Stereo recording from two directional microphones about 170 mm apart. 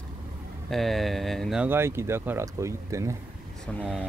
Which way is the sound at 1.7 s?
15° right (ahead or behind).